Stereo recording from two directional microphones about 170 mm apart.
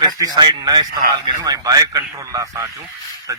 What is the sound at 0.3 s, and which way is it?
A man's voice, 25° right (ahead or behind).